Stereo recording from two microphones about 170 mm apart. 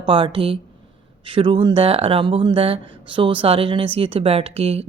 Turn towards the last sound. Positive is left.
turn(degrees=-35)  # may be behind; listen again after turning